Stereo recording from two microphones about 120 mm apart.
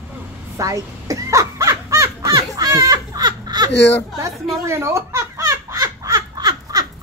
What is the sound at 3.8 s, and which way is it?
Speech, 20° left (ahead or behind).